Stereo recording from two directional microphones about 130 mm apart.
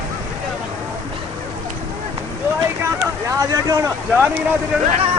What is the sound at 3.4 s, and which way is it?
Speech, 25° right (ahead or behind).